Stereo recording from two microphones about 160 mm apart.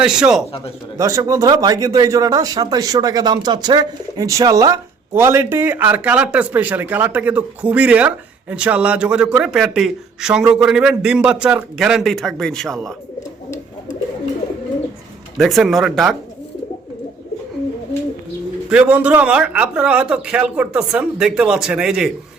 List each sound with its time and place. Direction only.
0.0 s speech: 5° right (ahead or behind)
0.9 s speech: 20° right (ahead or behind); by 12.9 s centre (ahead or behind)
15.4 s speech: centre (ahead or behind)
18.7 s speech: 10° right (ahead or behind)